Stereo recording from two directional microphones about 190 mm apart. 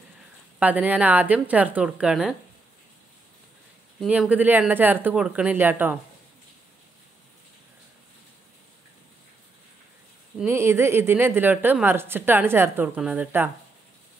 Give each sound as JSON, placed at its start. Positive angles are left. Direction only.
{"t": 0.6, "sound": "a woman's voice", "side_deg": -10}
{"t": 4.0, "sound": "a woman's voice", "side_deg": -5}
{"t": 10.4, "sound": "a woman's voice", "side_deg": -15}